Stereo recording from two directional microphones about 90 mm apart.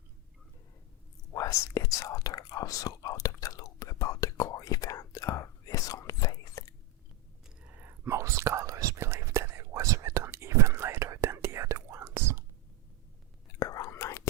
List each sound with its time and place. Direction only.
1.3 s whispering: 35° left (ahead or behind)
7.7 s whispering: 20° right (ahead or behind)
13.6 s whispering: 40° left (ahead or behind)